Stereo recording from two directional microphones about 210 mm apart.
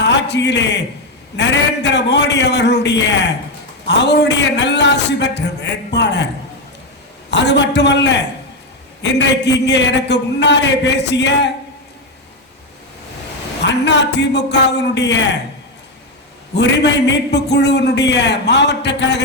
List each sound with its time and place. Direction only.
0.0 s a man's voice: 55° left (ahead or behind)
7.3 s a man's voice: 55° left (ahead or behind)
13.7 s a man's voice: 55° left (ahead or behind)
16.6 s a man's voice: 55° left (ahead or behind)